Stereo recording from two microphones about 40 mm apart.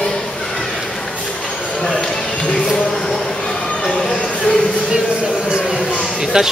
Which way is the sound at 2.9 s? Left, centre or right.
Centre.